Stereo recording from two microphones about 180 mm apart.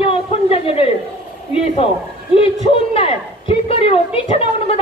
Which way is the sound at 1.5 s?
30° left (ahead or behind).